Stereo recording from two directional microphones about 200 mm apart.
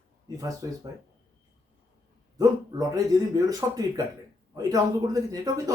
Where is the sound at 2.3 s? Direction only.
15° right (ahead or behind).